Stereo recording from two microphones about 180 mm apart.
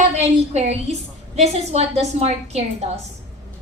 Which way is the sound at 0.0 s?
40° right (ahead or behind).